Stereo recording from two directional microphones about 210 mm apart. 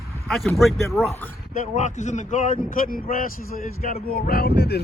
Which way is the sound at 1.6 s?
35° left (ahead or behind).